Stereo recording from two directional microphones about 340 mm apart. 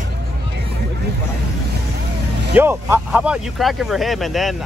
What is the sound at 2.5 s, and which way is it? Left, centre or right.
Speech, centre.